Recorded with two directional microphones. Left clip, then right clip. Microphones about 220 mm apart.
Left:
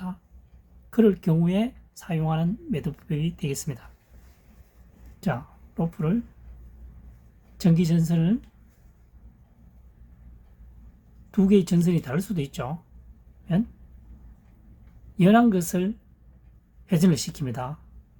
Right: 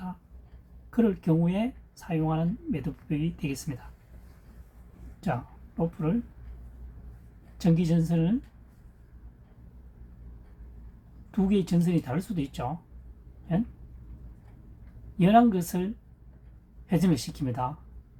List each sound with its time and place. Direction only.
0.9 s speech: 60° left (ahead or behind)
5.2 s speech: 55° left (ahead or behind)
7.6 s speech: 55° left (ahead or behind)
11.3 s speech: 55° left (ahead or behind)
15.2 s speech: 55° left (ahead or behind)